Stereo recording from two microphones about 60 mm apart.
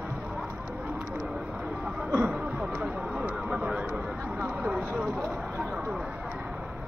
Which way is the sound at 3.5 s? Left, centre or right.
Centre.